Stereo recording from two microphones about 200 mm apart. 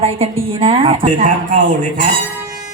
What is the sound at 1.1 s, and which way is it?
Speech, 40° right (ahead or behind).